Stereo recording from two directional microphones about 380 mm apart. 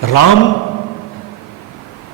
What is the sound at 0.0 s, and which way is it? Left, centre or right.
Speech, left.